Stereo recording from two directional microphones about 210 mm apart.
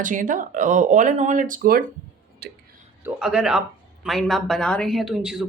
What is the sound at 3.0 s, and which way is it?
Speech, 5° right (ahead or behind).